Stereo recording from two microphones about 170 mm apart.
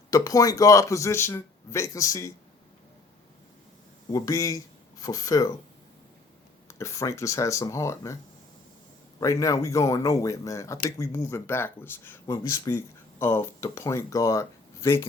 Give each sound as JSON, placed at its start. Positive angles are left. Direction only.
{"t": 0.1, "sound": "speech", "side_deg": 20}
{"t": 4.1, "sound": "speech", "side_deg": 20}
{"t": 6.7, "sound": "speech", "side_deg": 15}
{"t": 9.2, "sound": "speech", "side_deg": 20}